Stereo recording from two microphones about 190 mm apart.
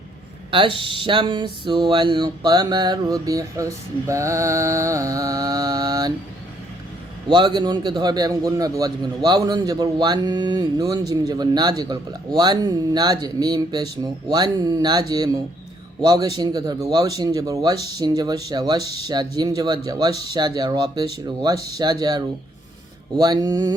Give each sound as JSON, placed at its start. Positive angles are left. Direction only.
{"t": 0.5, "sound": "speech", "side_deg": -25}
{"t": 7.3, "sound": "speech", "side_deg": -25}